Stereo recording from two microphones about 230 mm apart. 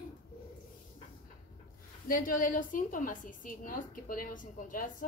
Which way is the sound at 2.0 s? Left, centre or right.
Left.